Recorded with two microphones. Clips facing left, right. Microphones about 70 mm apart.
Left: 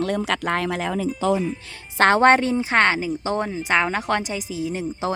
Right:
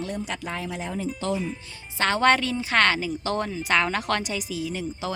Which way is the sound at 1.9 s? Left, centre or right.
Left.